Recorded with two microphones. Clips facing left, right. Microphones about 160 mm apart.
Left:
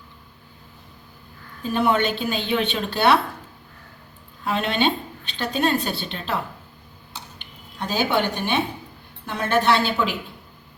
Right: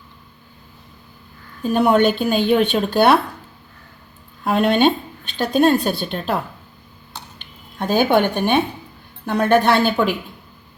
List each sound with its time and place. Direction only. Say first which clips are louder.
1.7 s a woman's voice: right 6 dB; 45° right (ahead or behind)
4.4 s a woman's voice: right 7 dB; 50° right (ahead or behind)
7.8 s a woman's voice: right 6 dB; 50° right (ahead or behind)